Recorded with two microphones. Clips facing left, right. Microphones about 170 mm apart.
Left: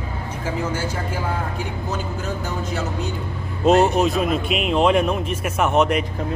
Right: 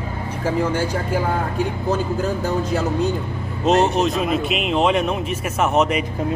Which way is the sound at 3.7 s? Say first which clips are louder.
Left 1 dB; centre (ahead or behind).